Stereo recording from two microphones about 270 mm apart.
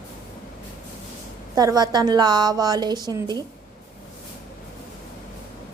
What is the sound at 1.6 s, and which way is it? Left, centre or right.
A woman's voice, centre.